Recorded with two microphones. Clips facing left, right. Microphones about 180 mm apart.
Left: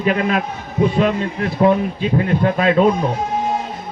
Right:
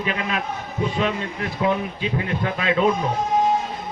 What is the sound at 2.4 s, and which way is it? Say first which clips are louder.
Speech: left 7 dB; 40° left (ahead or behind).